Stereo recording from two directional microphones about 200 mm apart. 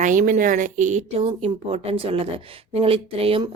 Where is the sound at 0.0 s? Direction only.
40° right (ahead or behind).